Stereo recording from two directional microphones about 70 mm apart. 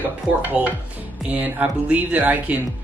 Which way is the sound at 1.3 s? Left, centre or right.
Right.